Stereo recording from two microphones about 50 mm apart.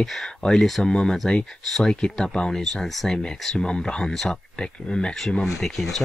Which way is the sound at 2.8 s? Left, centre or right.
Centre.